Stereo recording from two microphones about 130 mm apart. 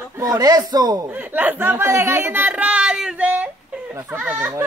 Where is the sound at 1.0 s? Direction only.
15° right (ahead or behind).